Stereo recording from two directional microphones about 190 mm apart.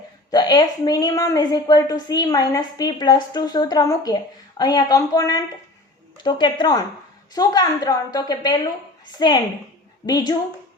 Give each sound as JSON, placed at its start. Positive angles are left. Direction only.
{"t": 0.3, "sound": "speech", "side_deg": 20}